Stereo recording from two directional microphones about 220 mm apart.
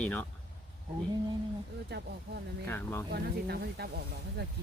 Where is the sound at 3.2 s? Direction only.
45° right (ahead or behind).